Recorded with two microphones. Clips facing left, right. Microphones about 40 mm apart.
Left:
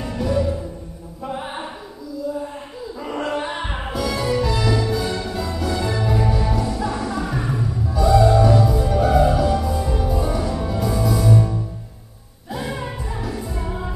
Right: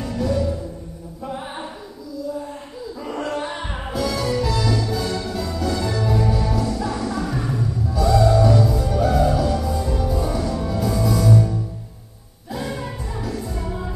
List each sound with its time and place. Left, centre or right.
0.0 s music: centre
1.2 s a sound: centre
3.0 s music: centre
3.9 s music: centre